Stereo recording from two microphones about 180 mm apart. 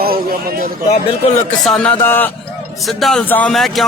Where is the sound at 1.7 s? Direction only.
5° left (ahead or behind).